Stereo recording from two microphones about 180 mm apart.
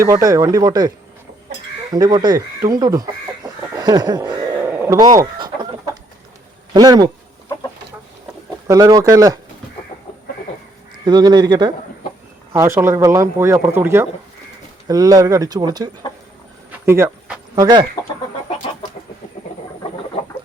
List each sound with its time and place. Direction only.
0.0 s speech: 20° right (ahead or behind)
6.7 s speech: 20° right (ahead or behind)
8.6 s speech: 20° right (ahead or behind)
11.0 s speech: 25° right (ahead or behind)
17.5 s speech: 25° right (ahead or behind)